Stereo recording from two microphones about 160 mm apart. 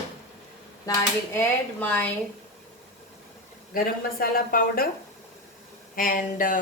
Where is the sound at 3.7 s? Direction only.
65° left (ahead or behind).